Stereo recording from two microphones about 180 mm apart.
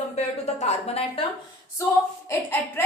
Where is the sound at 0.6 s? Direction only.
35° left (ahead or behind).